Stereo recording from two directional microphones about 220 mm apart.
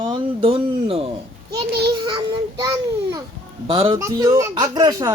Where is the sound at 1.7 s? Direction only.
50° right (ahead or behind).